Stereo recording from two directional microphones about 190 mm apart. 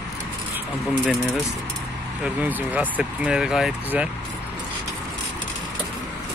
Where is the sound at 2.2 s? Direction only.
10° right (ahead or behind).